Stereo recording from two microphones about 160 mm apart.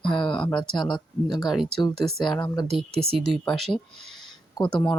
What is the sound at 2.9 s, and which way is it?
Speech, 40° right (ahead or behind).